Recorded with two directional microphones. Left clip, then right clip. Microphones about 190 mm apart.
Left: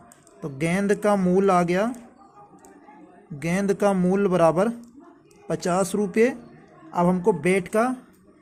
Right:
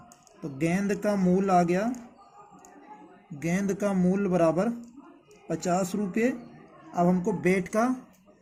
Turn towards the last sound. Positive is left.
turn(degrees=45)  # may be behind; listen again after turning